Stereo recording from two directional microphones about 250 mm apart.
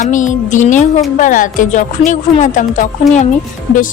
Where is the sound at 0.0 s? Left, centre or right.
Left.